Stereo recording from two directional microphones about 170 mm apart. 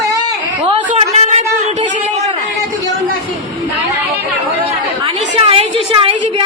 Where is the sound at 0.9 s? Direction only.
40° right (ahead or behind).